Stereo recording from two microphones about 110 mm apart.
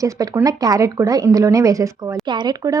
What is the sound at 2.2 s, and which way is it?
Speech, 40° right (ahead or behind).